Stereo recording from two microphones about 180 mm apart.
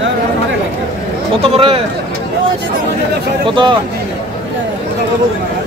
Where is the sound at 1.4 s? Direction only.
30° right (ahead or behind).